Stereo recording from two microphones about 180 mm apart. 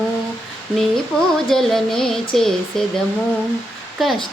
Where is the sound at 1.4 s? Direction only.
Centre (ahead or behind).